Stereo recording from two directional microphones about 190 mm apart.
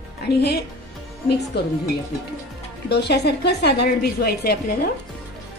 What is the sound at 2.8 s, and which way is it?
A woman's voice, 60° left (ahead or behind).